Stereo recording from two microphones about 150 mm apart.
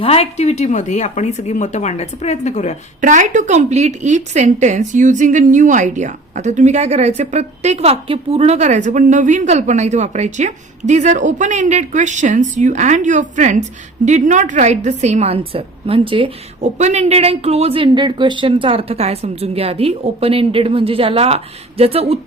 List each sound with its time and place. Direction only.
0.0 s speech: 40° left (ahead or behind)
3.0 s a woman's voice: 55° right (ahead or behind); by 22.2 s 40° right (ahead or behind)